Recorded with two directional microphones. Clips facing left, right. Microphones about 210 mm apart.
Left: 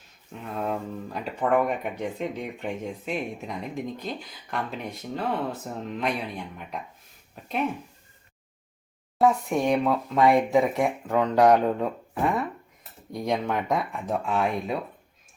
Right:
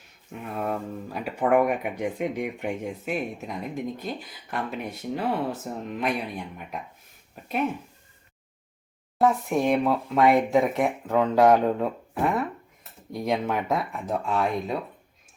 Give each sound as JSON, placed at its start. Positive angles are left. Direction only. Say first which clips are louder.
{"t": 0.4, "sound": "speech", "louder": "even", "side_deg": -5}
{"t": 9.1, "sound": "speech", "louder": "even", "side_deg": 0}